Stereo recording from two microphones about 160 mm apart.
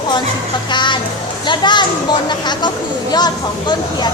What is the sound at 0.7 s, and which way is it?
Speech, 30° left (ahead or behind).